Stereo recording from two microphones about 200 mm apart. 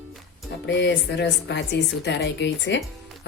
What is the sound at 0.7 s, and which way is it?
Speech, 65° left (ahead or behind).